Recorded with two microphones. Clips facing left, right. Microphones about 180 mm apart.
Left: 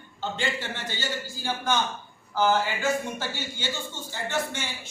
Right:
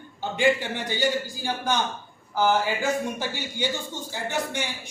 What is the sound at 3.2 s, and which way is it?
A man's voice, 15° right (ahead or behind).